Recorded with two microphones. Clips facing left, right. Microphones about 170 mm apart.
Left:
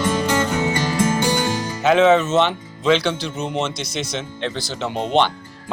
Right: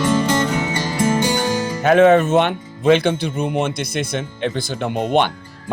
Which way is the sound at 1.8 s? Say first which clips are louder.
Right 2 dB; 55° right (ahead or behind).